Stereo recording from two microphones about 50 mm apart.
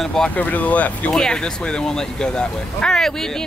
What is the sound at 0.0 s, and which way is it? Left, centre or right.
Speech, centre.